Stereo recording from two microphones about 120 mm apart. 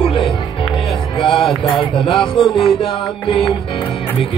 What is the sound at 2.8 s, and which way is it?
Music, 45° left (ahead or behind).